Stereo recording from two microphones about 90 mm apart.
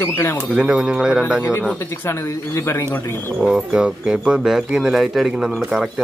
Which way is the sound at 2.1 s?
30° left (ahead or behind).